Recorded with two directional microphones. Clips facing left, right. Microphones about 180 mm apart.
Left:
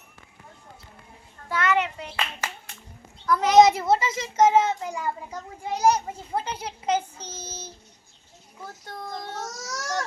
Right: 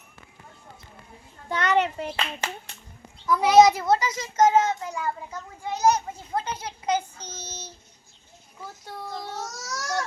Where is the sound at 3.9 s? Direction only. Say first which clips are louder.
Left 1 dB; 5° left (ahead or behind).